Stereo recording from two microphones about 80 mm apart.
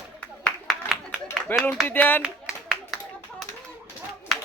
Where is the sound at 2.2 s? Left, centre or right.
Centre.